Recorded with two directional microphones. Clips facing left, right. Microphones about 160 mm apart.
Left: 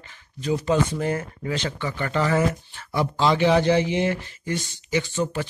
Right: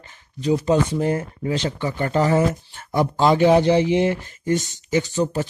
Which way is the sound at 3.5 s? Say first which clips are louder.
Right 4 dB; 20° right (ahead or behind).